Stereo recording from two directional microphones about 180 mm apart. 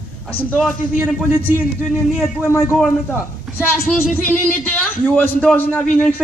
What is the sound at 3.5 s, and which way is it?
A man's voice, 10° left (ahead or behind).